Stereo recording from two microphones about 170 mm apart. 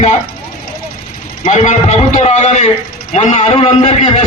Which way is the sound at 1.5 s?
40° left (ahead or behind).